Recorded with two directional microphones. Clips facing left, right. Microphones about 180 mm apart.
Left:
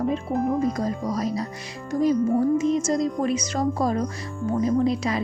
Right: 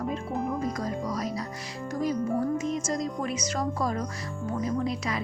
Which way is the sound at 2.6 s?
25° left (ahead or behind).